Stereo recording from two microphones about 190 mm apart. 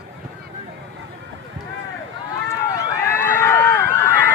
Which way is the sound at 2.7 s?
10° left (ahead or behind).